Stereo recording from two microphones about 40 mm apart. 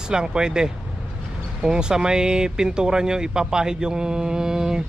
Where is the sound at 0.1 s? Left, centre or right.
Centre.